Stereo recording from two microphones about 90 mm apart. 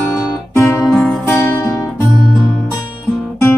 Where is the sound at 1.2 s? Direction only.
30° left (ahead or behind).